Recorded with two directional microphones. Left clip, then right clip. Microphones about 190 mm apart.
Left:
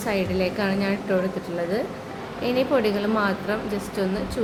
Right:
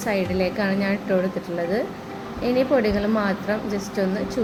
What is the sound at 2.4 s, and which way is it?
Speech, 10° right (ahead or behind).